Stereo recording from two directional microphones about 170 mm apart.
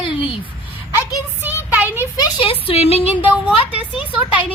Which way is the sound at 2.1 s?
25° left (ahead or behind).